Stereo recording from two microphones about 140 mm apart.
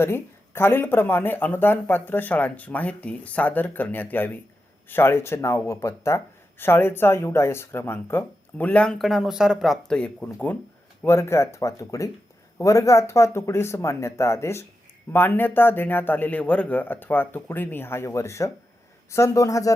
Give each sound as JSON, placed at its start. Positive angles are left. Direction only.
{"t": 0.0, "sound": "speech", "side_deg": 15}